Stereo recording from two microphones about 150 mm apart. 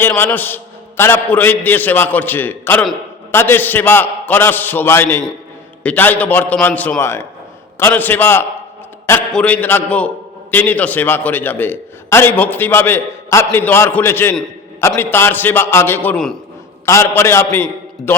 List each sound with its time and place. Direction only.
0.0 s a man's voice: 15° left (ahead or behind)